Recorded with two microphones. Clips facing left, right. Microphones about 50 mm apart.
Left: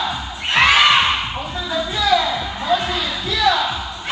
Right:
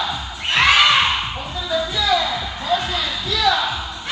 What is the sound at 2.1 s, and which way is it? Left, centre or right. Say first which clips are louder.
Music: left 3 dB; left.